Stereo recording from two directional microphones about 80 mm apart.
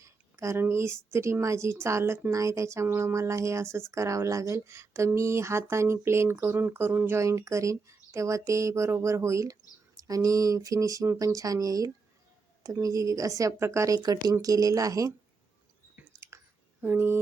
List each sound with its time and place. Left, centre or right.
0.0 s speech: right
7.2 s speech: right
14.0 s speech: right
16.8 s speech: right